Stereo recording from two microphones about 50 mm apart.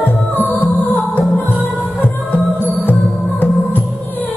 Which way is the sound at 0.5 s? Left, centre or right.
Left.